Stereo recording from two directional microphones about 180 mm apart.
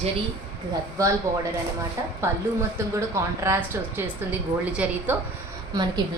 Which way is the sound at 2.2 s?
15° right (ahead or behind).